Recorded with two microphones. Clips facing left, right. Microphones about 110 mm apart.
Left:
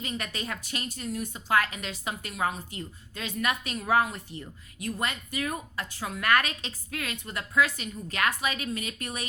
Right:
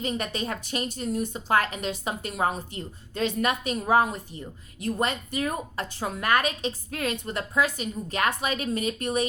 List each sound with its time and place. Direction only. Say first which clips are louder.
0.0 s a woman's voice: right 6 dB; 30° right (ahead or behind)
4.1 s speech: right 3 dB; 15° right (ahead or behind)
4.8 s a woman's voice: right 5 dB; 30° right (ahead or behind)
6.2 s a woman's voice: right 1 dB; 20° right (ahead or behind)
6.9 s a woman's voice: right 3 dB; 30° right (ahead or behind)